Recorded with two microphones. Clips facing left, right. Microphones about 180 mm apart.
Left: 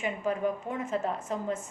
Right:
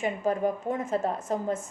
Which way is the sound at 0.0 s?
40° right (ahead or behind).